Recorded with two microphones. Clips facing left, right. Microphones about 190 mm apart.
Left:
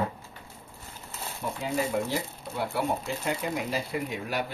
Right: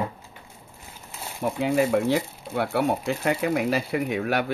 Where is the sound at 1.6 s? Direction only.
70° right (ahead or behind).